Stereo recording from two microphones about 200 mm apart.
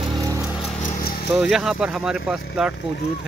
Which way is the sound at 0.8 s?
50° left (ahead or behind).